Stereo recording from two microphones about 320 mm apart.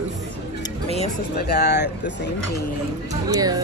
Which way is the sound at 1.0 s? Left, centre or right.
Left.